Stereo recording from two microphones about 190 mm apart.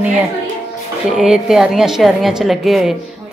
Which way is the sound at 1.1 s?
5° right (ahead or behind).